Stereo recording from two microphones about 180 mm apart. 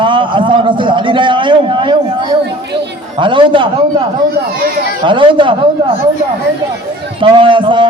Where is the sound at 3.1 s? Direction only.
25° right (ahead or behind).